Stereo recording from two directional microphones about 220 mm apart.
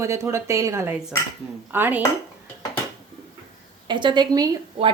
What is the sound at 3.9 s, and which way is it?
A woman's voice, 20° right (ahead or behind).